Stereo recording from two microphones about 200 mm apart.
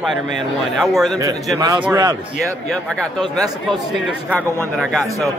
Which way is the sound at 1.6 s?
20° right (ahead or behind).